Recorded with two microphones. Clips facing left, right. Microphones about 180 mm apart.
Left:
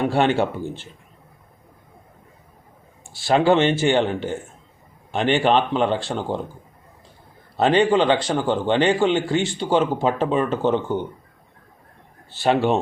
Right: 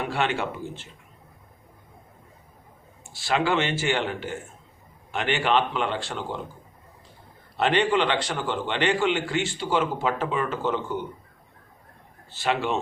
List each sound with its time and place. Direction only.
0.0 s speech: 30° left (ahead or behind)
3.0 s speech: 30° left (ahead or behind)
7.5 s speech: 40° left (ahead or behind)
12.3 s speech: 30° left (ahead or behind)